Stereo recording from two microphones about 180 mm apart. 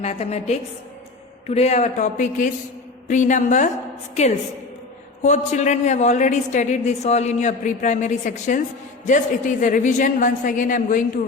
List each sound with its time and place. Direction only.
0.0 s a woman's voice: 35° left (ahead or behind)